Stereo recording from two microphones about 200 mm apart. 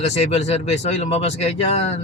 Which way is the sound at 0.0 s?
30° left (ahead or behind).